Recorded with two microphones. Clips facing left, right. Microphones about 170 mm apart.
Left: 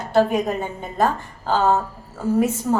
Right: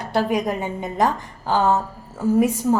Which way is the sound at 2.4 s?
10° right (ahead or behind).